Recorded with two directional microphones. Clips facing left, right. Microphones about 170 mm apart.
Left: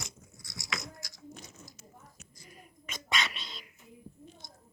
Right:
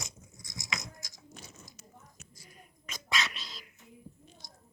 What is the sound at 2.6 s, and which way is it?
Whispering, centre (ahead or behind).